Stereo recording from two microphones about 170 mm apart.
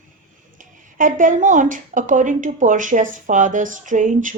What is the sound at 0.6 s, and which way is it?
A woman's voice, 50° right (ahead or behind).